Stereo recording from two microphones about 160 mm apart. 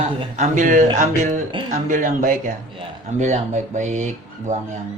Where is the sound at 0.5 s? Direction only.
55° right (ahead or behind).